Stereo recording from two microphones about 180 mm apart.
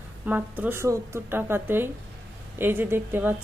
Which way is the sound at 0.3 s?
10° right (ahead or behind).